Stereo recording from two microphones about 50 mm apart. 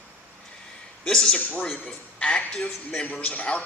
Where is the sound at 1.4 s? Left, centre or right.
Left.